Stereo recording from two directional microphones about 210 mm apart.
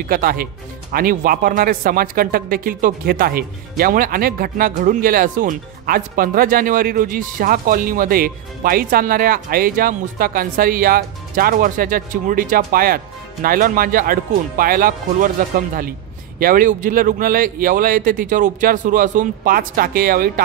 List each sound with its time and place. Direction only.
0.0 s a man's voice: 45° right (ahead or behind)